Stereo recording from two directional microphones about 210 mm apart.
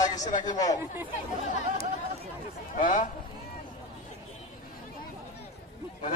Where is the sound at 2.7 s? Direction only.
40° left (ahead or behind).